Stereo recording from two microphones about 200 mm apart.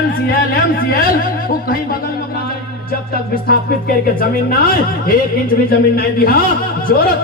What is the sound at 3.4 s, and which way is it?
Speech, 50° left (ahead or behind).